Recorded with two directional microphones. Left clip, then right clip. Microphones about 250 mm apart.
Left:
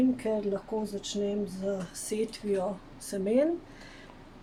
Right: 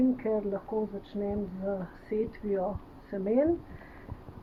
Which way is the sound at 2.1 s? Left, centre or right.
Left.